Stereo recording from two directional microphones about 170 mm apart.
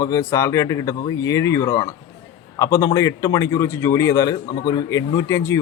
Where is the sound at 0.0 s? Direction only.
20° left (ahead or behind).